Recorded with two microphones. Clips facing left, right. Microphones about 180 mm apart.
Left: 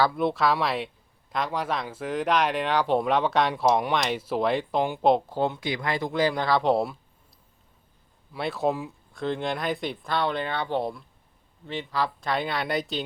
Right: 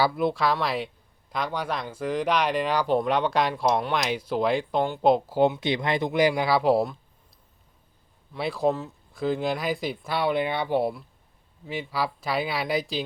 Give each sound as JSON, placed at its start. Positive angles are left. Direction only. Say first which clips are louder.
{"t": 0.0, "sound": "speech", "louder": "even", "side_deg": 0}
{"t": 5.4, "sound": "speech", "louder": "right 5 dB", "side_deg": -20}
{"t": 8.3, "sound": "speech", "louder": "right 1 dB", "side_deg": 0}